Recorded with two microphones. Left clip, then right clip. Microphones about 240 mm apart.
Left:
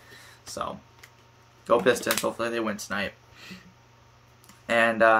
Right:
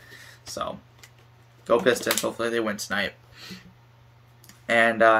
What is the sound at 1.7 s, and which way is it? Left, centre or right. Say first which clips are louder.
Speech: right 1 dB; centre.